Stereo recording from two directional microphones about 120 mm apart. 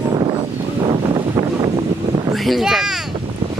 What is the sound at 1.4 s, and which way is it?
Vehicle, 20° right (ahead or behind).